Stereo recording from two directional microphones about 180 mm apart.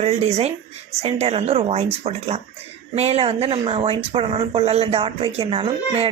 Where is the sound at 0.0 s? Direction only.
35° right (ahead or behind).